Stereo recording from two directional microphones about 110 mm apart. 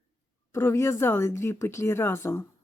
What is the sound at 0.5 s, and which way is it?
Speech, 25° left (ahead or behind).